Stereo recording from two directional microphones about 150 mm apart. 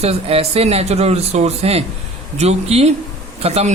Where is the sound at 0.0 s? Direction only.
40° right (ahead or behind).